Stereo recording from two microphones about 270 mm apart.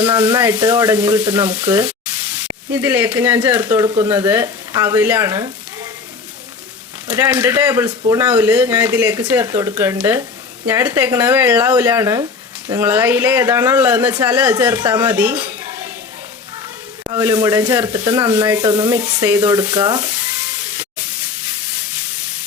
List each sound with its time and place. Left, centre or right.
0.1 s speech: centre
7.2 s speech: centre
8.2 s speech: centre
17.0 s speech: centre